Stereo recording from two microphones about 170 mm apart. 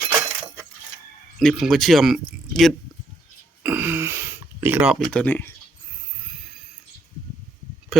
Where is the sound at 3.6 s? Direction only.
10° right (ahead or behind).